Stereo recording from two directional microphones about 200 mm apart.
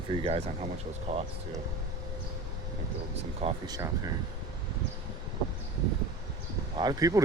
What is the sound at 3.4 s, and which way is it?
Speech, 20° right (ahead or behind).